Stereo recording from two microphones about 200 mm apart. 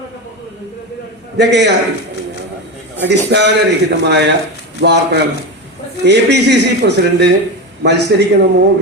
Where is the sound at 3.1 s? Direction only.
60° right (ahead or behind).